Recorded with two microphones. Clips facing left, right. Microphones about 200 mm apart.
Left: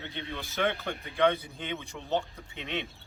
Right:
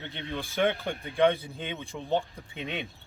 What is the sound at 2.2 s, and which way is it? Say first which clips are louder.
Speech: right 3 dB; 15° right (ahead or behind).